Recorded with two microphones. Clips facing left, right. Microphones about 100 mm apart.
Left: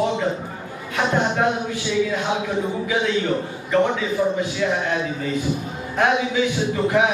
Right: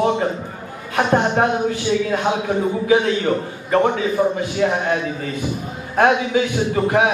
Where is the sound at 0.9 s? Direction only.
50° right (ahead or behind).